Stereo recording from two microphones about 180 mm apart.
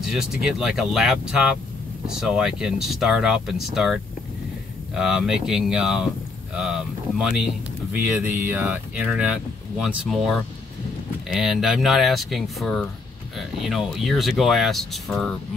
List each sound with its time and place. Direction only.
0.0 s speech: centre (ahead or behind)